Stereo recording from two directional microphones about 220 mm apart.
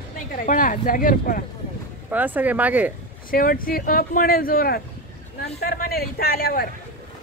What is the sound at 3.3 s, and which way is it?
Speech, 40° left (ahead or behind).